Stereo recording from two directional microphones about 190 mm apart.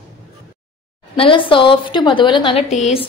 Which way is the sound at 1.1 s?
25° left (ahead or behind).